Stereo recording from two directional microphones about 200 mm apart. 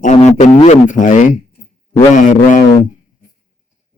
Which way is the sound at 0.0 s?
35° left (ahead or behind).